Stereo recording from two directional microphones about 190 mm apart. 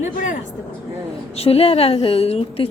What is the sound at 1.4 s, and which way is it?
A woman's voice, 30° left (ahead or behind).